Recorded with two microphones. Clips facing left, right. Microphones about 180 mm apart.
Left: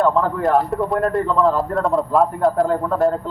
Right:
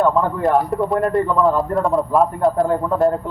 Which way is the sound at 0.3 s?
Centre (ahead or behind).